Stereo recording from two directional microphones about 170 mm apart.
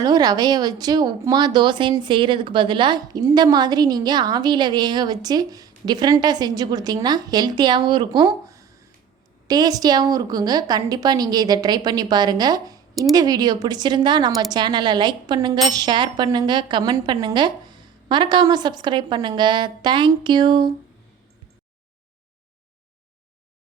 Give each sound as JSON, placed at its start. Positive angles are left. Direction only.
{"t": 0.0, "sound": "speech", "side_deg": -20}